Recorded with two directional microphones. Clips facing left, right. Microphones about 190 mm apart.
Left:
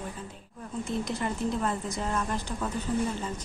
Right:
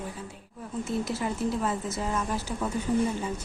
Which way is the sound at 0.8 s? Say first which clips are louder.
Right 1 dB; 5° right (ahead or behind).